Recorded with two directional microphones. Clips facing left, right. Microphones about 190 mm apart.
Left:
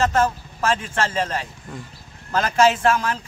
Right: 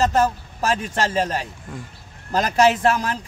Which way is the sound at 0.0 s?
35° right (ahead or behind).